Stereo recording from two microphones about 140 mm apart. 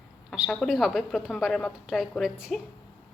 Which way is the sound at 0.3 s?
Centre (ahead or behind).